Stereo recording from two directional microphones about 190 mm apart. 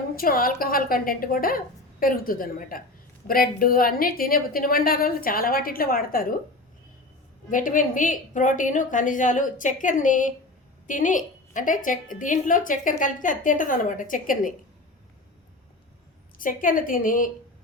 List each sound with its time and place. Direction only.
0.2 s a woman's voice: 50° left (ahead or behind)
7.5 s a woman's voice: 45° left (ahead or behind)
16.4 s a woman's voice: 45° left (ahead or behind)